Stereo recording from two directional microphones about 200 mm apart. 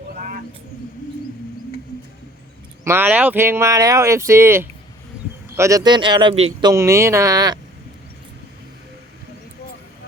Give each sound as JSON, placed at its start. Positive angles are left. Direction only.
{"t": 0.2, "sound": "bird", "side_deg": -45}
{"t": 2.8, "sound": "a man's voice", "side_deg": -10}
{"t": 6.7, "sound": "speech", "side_deg": -15}